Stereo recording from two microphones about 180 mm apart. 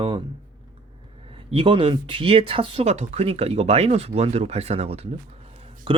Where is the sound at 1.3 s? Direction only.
30° right (ahead or behind).